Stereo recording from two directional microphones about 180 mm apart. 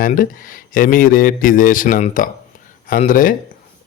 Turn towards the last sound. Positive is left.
turn(degrees=50)  # may be behind; listen again after turning